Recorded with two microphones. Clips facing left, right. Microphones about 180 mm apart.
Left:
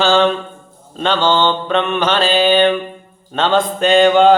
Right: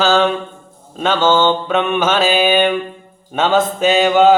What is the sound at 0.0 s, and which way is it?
Mantra, 5° right (ahead or behind).